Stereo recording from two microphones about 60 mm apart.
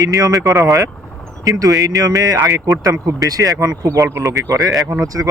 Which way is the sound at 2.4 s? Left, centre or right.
Right.